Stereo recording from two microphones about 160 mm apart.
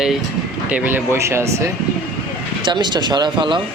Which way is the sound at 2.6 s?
30° right (ahead or behind).